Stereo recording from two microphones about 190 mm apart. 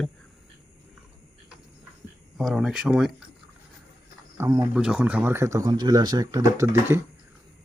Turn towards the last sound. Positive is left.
turn(degrees=-20)  # may be behind; listen again after turning